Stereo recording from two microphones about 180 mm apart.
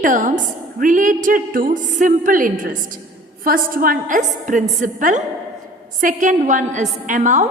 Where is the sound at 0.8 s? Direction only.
45° right (ahead or behind).